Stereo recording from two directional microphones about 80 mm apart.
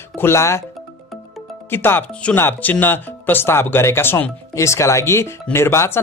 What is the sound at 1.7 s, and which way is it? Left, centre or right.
Speech, left.